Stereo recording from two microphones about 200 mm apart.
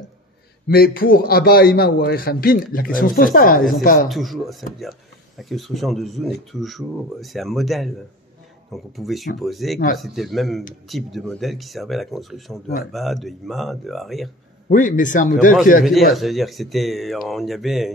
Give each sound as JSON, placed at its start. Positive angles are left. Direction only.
{"t": 0.7, "sound": "a man's voice", "side_deg": 50}
{"t": 4.1, "sound": "speech", "side_deg": 0}
{"t": 14.7, "sound": "speech", "side_deg": 40}
{"t": 15.8, "sound": "speech", "side_deg": 0}